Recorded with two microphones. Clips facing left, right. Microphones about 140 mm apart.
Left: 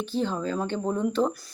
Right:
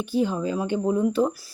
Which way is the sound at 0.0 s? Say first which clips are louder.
Right 4 dB; 10° right (ahead or behind).